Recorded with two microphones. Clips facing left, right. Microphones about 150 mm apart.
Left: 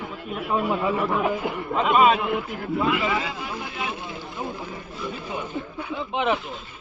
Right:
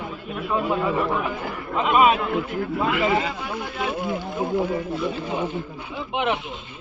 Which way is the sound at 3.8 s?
50° right (ahead or behind).